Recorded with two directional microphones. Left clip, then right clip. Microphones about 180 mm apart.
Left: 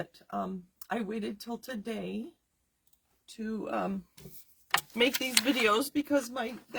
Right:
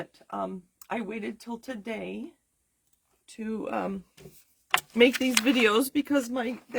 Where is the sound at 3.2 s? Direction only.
35° right (ahead or behind).